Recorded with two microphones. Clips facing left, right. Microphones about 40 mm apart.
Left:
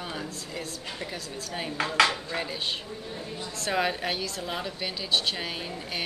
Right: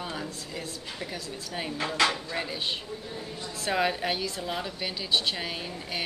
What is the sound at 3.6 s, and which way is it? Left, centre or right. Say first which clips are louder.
A woman's voice: right 1 dB; centre.